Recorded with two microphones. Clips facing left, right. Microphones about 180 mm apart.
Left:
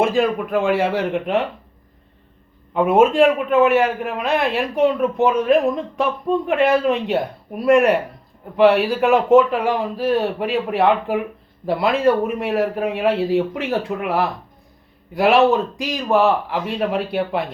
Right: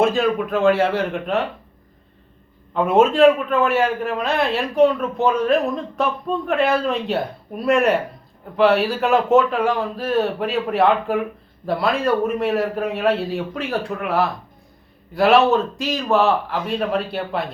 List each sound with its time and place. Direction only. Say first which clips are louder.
0.0 s a man's voice: left 1 dB; centre (ahead or behind)
0.5 s a man's voice: right 2 dB; 15° left (ahead or behind)
2.7 s a man's voice: left 2 dB; 15° left (ahead or behind)